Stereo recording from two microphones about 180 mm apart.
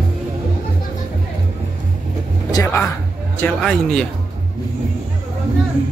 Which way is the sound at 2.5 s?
15° left (ahead or behind).